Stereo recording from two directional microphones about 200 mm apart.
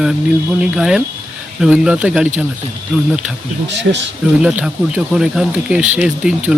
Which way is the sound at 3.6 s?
65° right (ahead or behind).